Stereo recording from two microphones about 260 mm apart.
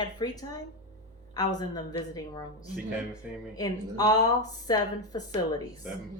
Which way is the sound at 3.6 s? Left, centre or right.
Centre.